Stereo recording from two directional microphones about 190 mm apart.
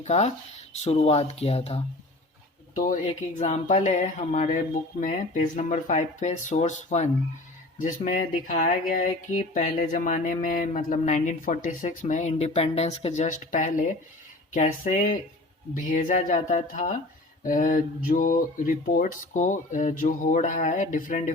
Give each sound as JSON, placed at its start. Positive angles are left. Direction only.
{"t": 0.0, "sound": "speech", "side_deg": 35}
{"t": 2.7, "sound": "speech", "side_deg": 45}